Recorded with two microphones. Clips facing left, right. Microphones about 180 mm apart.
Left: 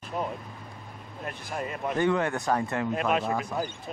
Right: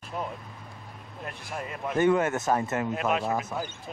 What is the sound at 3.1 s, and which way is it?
Speech, centre (ahead or behind).